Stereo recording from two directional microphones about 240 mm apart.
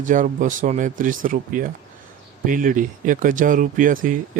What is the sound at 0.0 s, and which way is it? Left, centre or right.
Speech, right.